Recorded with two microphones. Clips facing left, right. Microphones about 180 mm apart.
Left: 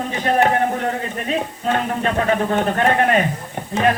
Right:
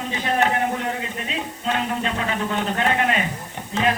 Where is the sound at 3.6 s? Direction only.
50° left (ahead or behind).